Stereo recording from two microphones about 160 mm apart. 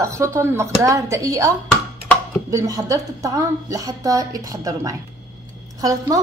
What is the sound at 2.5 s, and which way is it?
A woman's voice, 20° right (ahead or behind).